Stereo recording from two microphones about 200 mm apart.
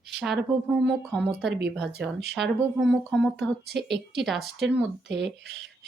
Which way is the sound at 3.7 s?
55° right (ahead or behind).